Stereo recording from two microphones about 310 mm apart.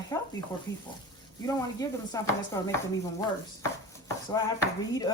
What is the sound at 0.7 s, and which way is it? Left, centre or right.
Speech, left.